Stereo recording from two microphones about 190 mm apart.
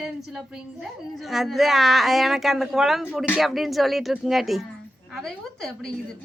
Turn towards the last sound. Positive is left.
turn(degrees=0)  # may be behind; listen again after turning